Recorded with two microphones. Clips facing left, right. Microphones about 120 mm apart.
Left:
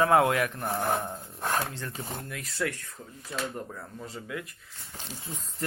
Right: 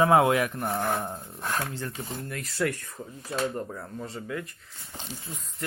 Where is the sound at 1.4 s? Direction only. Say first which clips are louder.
Left 2 dB; 25° left (ahead or behind).